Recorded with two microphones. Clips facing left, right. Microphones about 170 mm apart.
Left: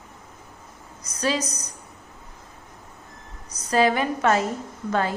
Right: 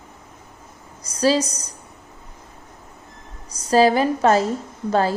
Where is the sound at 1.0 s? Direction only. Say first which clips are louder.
Right 7 dB; 30° right (ahead or behind).